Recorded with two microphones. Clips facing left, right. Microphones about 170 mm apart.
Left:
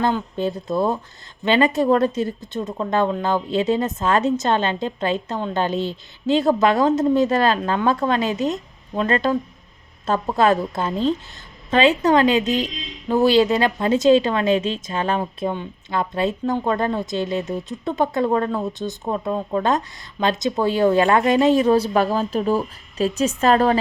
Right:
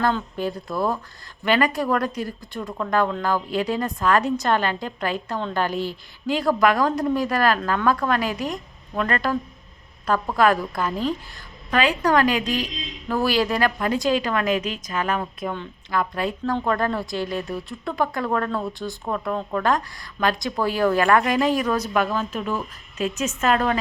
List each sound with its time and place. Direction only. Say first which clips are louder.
0.3 s a woman's voice: left 4 dB; 25° left (ahead or behind)